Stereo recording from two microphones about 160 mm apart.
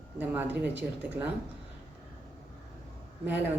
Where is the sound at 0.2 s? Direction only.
10° right (ahead or behind).